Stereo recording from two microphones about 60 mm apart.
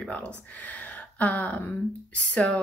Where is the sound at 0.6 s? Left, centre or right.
Left.